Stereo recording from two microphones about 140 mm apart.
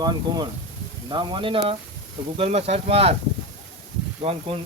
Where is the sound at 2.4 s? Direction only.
50° right (ahead or behind).